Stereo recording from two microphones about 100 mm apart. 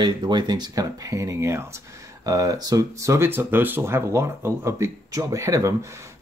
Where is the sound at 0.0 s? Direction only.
50° right (ahead or behind).